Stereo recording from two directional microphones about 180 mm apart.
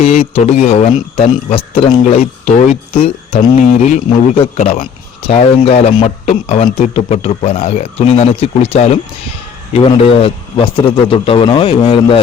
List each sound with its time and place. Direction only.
0.0 s speech: 35° left (ahead or behind)
2.9 s a man's voice: 35° left (ahead or behind)